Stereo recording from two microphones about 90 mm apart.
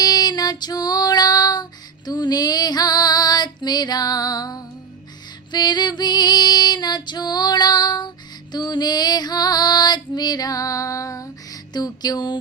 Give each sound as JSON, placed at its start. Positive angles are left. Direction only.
{"t": 0.0, "sound": "female singing", "side_deg": 50}